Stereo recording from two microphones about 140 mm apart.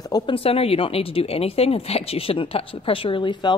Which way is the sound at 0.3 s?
45° left (ahead or behind).